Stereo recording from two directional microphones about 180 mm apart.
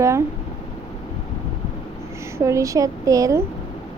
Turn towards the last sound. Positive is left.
turn(degrees=-20)  # may be behind; listen again after turning